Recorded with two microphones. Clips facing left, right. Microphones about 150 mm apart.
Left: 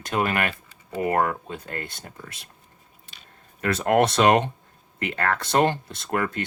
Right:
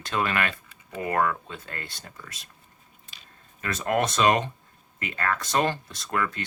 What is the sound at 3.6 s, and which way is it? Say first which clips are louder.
Speech: left 5 dB; 65° left (ahead or behind).